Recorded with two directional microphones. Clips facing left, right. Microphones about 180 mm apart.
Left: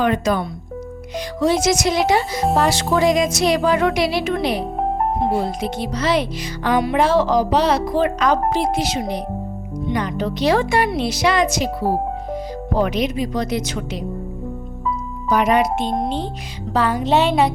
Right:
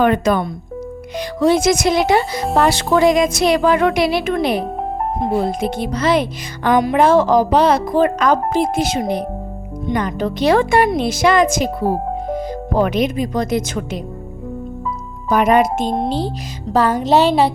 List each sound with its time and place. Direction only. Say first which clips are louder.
0.0 s speech: right 4 dB; 55° right (ahead or behind)
15.3 s a woman's voice: right 3 dB; 50° right (ahead or behind); by 17.5 s 35° right (ahead or behind)